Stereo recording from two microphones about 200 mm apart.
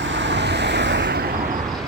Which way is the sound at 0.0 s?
65° right (ahead or behind).